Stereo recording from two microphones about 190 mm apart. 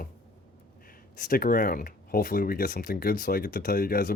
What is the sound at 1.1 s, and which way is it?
Speech, 45° left (ahead or behind).